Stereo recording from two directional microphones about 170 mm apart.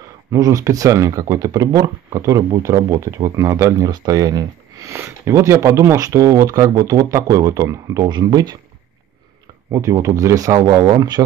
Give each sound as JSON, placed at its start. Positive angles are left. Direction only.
{"t": 0.3, "sound": "speech", "side_deg": -20}
{"t": 9.7, "sound": "speech", "side_deg": -20}